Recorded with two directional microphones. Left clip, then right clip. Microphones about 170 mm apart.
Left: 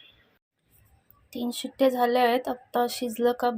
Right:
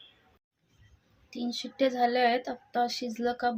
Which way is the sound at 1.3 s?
20° left (ahead or behind).